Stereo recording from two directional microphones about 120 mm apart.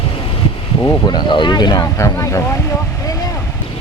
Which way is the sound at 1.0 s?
40° left (ahead or behind).